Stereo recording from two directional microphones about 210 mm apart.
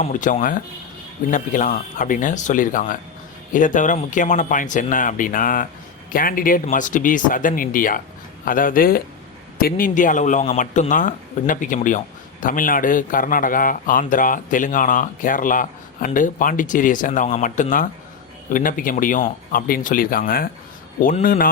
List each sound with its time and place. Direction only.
0.0 s speech: 35° left (ahead or behind)